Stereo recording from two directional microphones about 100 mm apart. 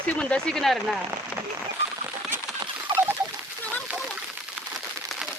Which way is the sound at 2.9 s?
55° right (ahead or behind).